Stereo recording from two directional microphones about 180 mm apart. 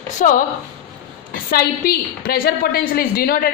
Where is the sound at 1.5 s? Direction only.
60° left (ahead or behind).